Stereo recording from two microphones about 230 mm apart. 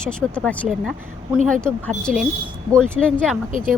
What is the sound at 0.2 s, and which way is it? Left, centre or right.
Speech, centre.